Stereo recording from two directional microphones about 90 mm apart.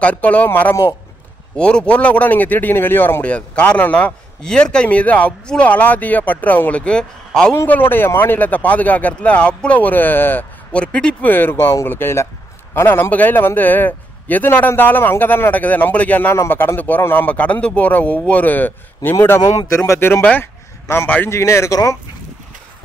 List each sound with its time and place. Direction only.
0.0 s speech: 15° left (ahead or behind)
7.6 s speech: 20° left (ahead or behind)
11.2 s a man's voice: 25° left (ahead or behind)
21.3 s speech: 30° left (ahead or behind)